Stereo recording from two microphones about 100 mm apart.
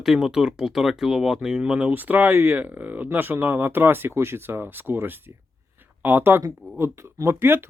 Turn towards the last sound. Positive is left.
turn(degrees=-25)  # may be behind; listen again after turning